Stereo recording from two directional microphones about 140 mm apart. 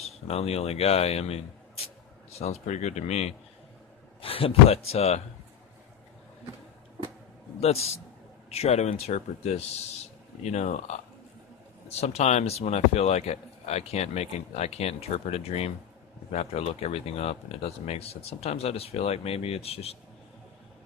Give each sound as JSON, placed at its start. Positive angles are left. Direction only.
{"t": 0.0, "sound": "speech", "side_deg": 45}
{"t": 7.6, "sound": "speech", "side_deg": 50}
{"t": 11.9, "sound": "speech", "side_deg": 50}